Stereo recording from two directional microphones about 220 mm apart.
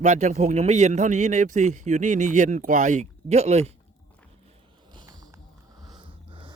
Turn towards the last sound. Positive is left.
turn(degrees=-20)  # may be behind; listen again after turning